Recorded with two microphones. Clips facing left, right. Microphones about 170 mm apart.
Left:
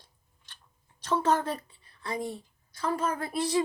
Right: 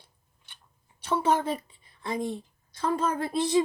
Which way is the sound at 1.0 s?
10° right (ahead or behind).